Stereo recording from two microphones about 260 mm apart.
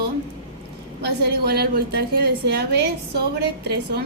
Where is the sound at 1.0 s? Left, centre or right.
Right.